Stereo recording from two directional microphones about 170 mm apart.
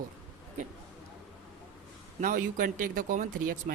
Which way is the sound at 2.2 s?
50° right (ahead or behind).